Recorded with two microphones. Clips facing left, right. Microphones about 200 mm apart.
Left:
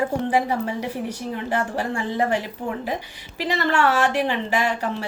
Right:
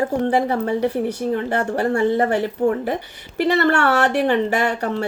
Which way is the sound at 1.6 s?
45° right (ahead or behind).